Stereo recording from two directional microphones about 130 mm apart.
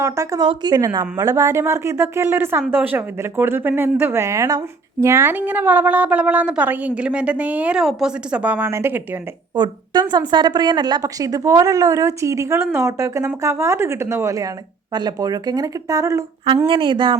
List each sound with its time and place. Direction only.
0.0 s a woman's voice: 25° right (ahead or behind)
9.6 s a woman's voice: 35° right (ahead or behind)
16.6 s speech: 40° right (ahead or behind)